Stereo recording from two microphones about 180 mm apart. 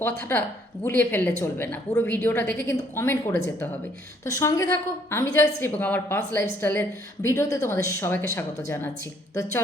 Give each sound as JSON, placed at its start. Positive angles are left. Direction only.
{"t": 0.3, "sound": "a woman's voice", "side_deg": 15}
{"t": 9.3, "sound": "speech", "side_deg": 20}